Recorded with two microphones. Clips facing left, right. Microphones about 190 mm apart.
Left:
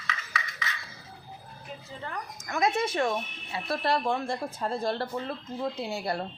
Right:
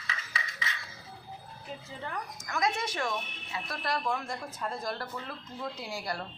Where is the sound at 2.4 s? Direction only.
25° left (ahead or behind).